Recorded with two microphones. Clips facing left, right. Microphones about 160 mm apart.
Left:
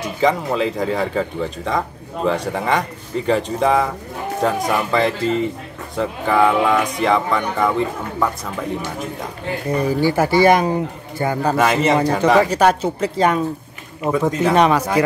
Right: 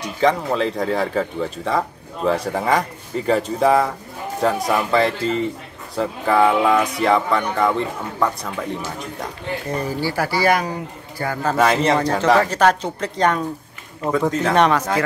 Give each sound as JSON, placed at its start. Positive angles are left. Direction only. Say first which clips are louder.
{"t": 0.0, "sound": "speech", "louder": "even", "side_deg": 0}
{"t": 9.8, "sound": "speech", "louder": "left 7 dB", "side_deg": 15}
{"t": 11.5, "sound": "speech", "louder": "right 1 dB", "side_deg": 5}